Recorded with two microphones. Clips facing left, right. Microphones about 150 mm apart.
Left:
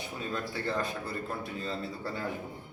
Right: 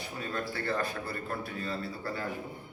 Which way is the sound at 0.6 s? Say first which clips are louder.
Right 1 dB; 20° left (ahead or behind).